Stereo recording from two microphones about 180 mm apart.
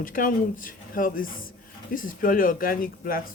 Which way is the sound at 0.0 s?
50° left (ahead or behind).